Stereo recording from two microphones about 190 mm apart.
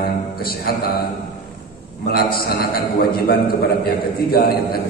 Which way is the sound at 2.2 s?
50° left (ahead or behind).